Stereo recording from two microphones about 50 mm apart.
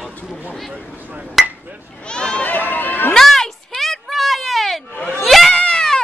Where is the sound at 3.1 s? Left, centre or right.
Centre.